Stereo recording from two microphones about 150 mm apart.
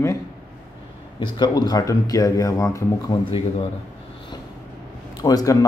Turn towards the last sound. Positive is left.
turn(degrees=25)  # may be behind; listen again after turning